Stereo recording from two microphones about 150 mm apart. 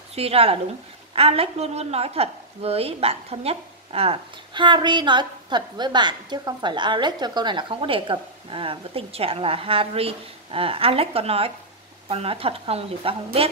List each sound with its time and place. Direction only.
0.1 s a woman's voice: 40° right (ahead or behind)